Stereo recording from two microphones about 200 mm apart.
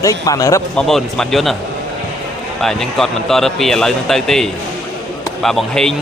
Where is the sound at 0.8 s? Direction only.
Centre (ahead or behind).